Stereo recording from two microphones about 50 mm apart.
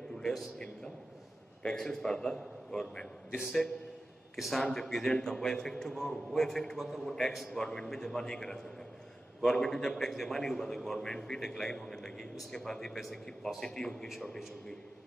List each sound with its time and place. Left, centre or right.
0.2 s a man's voice: centre
1.6 s a man's voice: centre
4.4 s a man's voice: centre